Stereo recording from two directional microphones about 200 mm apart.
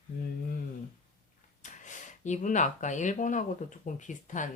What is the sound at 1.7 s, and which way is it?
Speech, 40° left (ahead or behind).